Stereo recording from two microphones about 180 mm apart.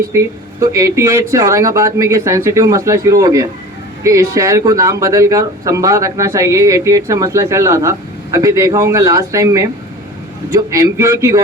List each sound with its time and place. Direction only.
0.6 s speech: 15° right (ahead or behind)